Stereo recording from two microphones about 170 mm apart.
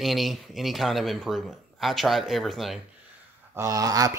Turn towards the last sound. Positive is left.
turn(degrees=-20)  # may be behind; listen again after turning